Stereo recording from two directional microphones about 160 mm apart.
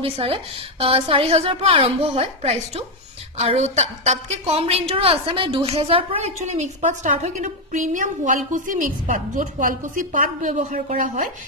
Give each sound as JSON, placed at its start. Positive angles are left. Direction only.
{"t": 0.0, "sound": "a woman's voice", "side_deg": -35}